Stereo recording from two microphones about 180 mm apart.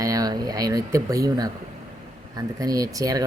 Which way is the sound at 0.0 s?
20° right (ahead or behind).